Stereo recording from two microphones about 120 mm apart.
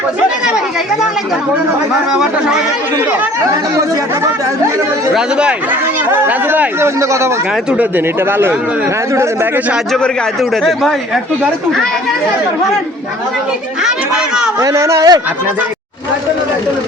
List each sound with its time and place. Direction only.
3.8 s speech: 25° right (ahead or behind)
5.1 s speech: 10° right (ahead or behind)
10.5 s speech: centre (ahead or behind)
13.8 s speech: 5° right (ahead or behind)
14.6 s speech: 25° right (ahead or behind)